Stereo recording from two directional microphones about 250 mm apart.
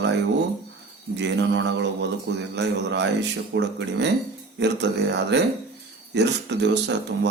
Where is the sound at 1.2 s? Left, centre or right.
Right.